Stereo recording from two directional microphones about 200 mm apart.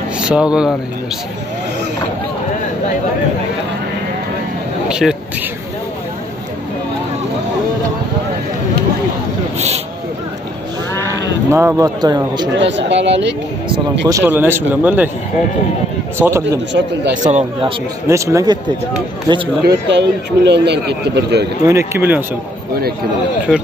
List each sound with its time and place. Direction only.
0.2 s speech: 5° right (ahead or behind)
4.8 s a sound: 5° right (ahead or behind)
11.5 s speech: 15° right (ahead or behind)
12.5 s a man's voice: 65° right (ahead or behind)
14.0 s speech: 15° right (ahead or behind)
16.2 s speech: 15° right (ahead or behind)
16.4 s a man's voice: 60° right (ahead or behind)
17.3 s speech: 30° right (ahead or behind)
18.0 s speech: 15° right (ahead or behind)
19.6 s a man's voice: 55° right (ahead or behind)
21.6 s speech: 15° right (ahead or behind)